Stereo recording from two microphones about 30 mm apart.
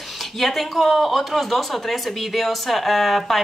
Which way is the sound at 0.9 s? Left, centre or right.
Centre.